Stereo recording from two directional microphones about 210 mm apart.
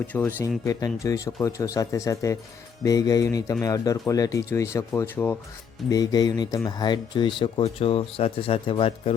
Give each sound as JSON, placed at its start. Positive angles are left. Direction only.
{"t": 0.1, "sound": "speech", "side_deg": 10}